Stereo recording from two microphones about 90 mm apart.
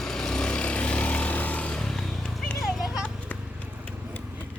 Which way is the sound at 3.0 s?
15° left (ahead or behind).